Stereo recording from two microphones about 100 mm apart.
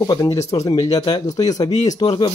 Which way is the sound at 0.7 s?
40° left (ahead or behind).